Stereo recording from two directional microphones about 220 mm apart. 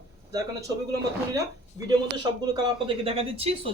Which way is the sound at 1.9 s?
20° right (ahead or behind).